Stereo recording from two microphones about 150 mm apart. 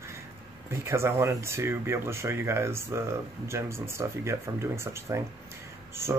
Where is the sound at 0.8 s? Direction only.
20° right (ahead or behind).